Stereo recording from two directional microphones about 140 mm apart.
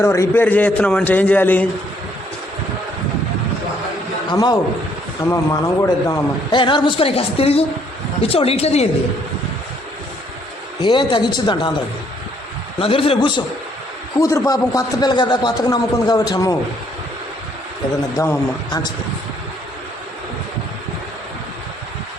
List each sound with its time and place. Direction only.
0.0 s a man's voice: 20° left (ahead or behind)
4.3 s a man's voice: 30° left (ahead or behind)
6.5 s a woman's voice: 35° left (ahead or behind)
10.8 s a woman's voice: 35° left (ahead or behind)
12.8 s a woman's voice: 40° left (ahead or behind)
14.2 s a man's voice: 20° left (ahead or behind)